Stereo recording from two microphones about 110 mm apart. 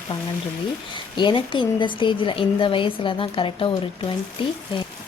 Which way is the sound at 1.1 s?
45° left (ahead or behind).